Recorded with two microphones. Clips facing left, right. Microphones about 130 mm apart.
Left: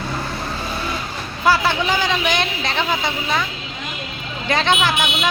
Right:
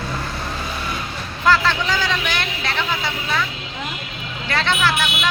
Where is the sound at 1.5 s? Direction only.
15° left (ahead or behind).